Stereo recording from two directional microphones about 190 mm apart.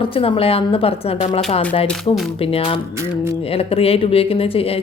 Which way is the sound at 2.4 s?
30° left (ahead or behind).